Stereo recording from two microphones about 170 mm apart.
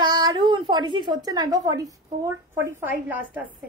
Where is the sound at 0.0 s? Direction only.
25° right (ahead or behind).